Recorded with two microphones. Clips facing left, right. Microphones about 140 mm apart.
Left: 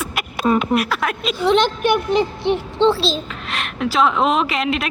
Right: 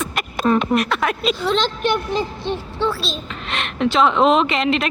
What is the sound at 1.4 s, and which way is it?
Speech, 15° left (ahead or behind).